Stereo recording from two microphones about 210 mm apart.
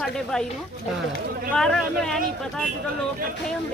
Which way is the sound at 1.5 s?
5° left (ahead or behind).